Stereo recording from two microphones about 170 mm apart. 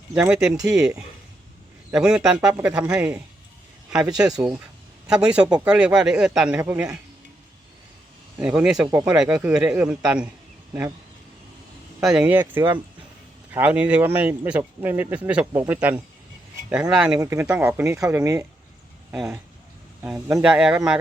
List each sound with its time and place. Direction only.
0.1 s a man's voice: 10° right (ahead or behind)
4.4 s a man's voice: 5° right (ahead or behind)
8.4 s a man's voice: 5° right (ahead or behind)
11.9 s a man's voice: 5° right (ahead or behind)
19.1 s a man's voice: 5° right (ahead or behind)